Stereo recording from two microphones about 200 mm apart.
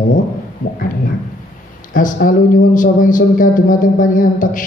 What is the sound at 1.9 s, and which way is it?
A man's voice, 45° left (ahead or behind).